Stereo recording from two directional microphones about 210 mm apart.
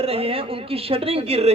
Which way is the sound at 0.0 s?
30° right (ahead or behind).